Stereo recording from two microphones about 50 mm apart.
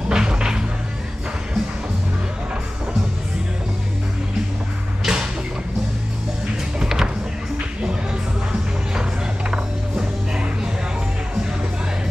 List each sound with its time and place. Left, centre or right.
0.1 s music: centre
5.0 s music: centre
6.8 s music: centre
9.5 s music: centre